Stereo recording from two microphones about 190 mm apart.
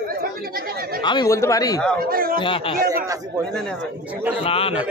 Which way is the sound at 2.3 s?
25° left (ahead or behind).